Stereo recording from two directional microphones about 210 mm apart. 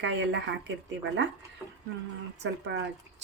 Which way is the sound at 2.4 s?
55° right (ahead or behind).